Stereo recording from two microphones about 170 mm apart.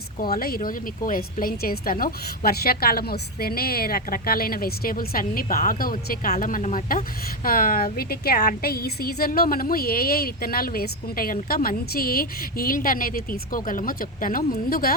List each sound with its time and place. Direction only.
0.2 s speech: 60° left (ahead or behind)
6.3 s speech: 45° left (ahead or behind)